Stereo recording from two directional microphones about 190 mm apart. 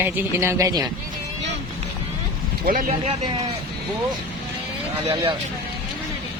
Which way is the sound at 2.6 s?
45° right (ahead or behind).